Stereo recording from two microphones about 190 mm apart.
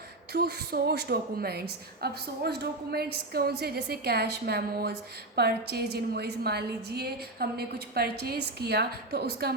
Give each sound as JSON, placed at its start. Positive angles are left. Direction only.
{"t": 0.3, "sound": "a woman's voice", "side_deg": -55}